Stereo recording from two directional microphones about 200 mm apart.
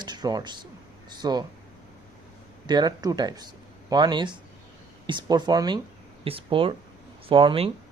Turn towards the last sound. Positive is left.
turn(degrees=-25)  # may be behind; listen again after turning